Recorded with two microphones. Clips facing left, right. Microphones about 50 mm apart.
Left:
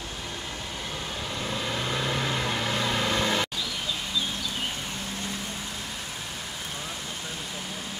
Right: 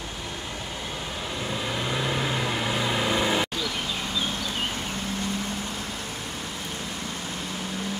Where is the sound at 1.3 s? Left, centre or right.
Centre.